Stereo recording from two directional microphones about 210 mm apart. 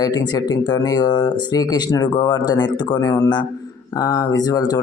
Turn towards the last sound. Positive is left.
turn(degrees=20)  # may be behind; listen again after turning